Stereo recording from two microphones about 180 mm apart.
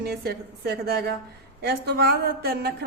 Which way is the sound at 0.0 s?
60° right (ahead or behind).